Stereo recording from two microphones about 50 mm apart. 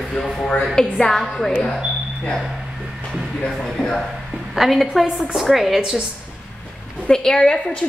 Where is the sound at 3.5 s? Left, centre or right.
Centre.